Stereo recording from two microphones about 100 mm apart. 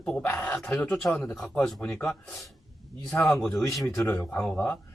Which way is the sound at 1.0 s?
5° left (ahead or behind).